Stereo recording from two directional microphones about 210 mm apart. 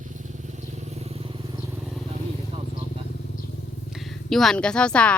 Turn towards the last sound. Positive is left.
turn(degrees=5)  # may be behind; listen again after turning